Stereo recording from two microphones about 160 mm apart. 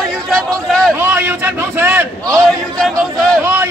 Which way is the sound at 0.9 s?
15° right (ahead or behind).